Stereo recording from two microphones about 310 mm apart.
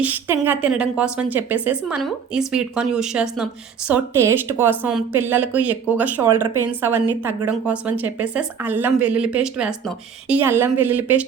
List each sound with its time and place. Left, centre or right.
0.0 s speech: centre